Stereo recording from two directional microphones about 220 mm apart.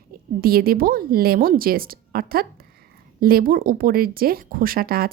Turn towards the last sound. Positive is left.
turn(degrees=-40)  # may be behind; listen again after turning